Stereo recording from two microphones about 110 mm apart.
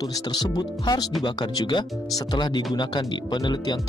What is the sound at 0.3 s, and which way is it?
Speech, 40° left (ahead or behind).